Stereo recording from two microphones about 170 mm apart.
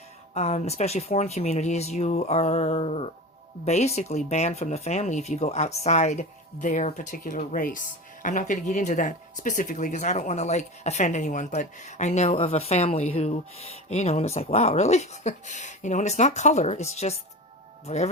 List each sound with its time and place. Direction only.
0.3 s speech: 40° left (ahead or behind)